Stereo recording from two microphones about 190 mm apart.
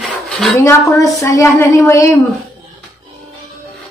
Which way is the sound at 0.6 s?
15° left (ahead or behind).